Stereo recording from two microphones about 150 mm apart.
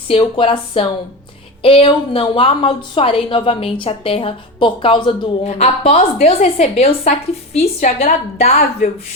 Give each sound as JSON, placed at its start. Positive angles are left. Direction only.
{"t": 0.1, "sound": "a woman's voice", "side_deg": 35}
{"t": 5.4, "sound": "a woman's voice", "side_deg": 45}